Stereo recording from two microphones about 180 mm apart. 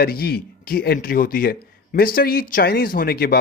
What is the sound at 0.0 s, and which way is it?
A man's voice, 60° left (ahead or behind).